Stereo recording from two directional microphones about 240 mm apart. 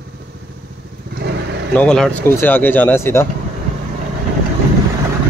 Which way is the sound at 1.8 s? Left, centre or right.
Centre.